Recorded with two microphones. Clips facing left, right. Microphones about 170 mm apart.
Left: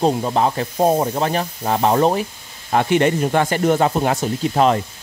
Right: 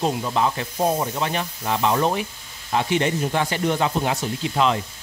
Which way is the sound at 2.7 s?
55° left (ahead or behind).